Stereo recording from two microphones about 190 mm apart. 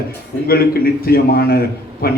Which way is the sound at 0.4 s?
55° left (ahead or behind).